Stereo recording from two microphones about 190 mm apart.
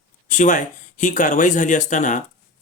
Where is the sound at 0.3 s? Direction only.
40° left (ahead or behind).